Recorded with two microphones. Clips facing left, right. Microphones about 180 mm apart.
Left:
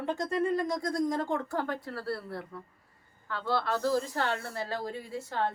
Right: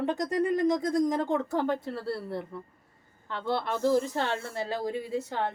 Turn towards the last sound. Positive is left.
turn(degrees=-20)  # may be behind; listen again after turning